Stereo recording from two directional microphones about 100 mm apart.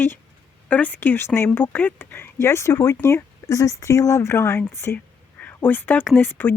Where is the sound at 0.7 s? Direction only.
15° left (ahead or behind).